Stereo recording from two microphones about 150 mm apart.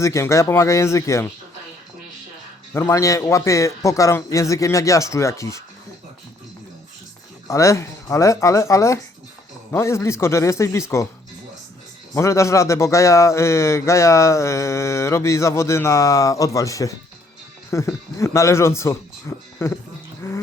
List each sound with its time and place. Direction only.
0.0 s a man's voice: 20° left (ahead or behind)
2.7 s a man's voice: 20° left (ahead or behind)
7.4 s a man's voice: 20° left (ahead or behind)
12.1 s a man's voice: 20° left (ahead or behind)
20.2 s a sound: 20° left (ahead or behind)